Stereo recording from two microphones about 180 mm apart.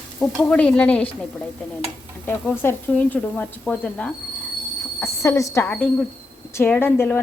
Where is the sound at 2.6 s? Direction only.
10° left (ahead or behind).